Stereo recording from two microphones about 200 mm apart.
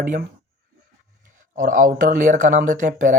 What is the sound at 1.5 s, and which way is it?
Speech, 40° right (ahead or behind).